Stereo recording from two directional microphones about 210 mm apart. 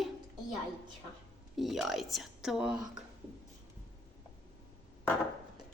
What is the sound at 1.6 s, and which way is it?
Speech, centre (ahead or behind).